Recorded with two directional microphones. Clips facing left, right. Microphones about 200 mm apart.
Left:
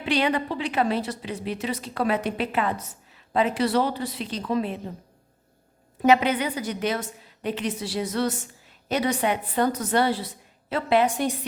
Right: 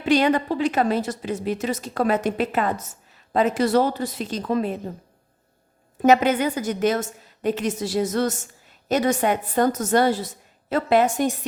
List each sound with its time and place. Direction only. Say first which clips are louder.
0.0 s a woman's voice: right 5 dB; 45° right (ahead or behind)
6.0 s a woman's voice: right 3 dB; 45° right (ahead or behind)